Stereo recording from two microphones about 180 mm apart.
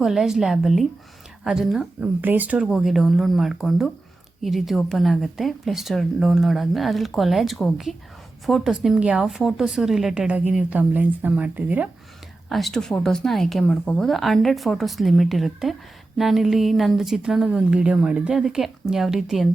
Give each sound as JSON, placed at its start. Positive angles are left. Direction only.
{"t": 0.0, "sound": "a woman's voice", "side_deg": 0}